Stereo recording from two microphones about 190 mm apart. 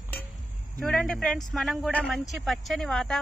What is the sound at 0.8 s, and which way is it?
A man's voice, 5° left (ahead or behind).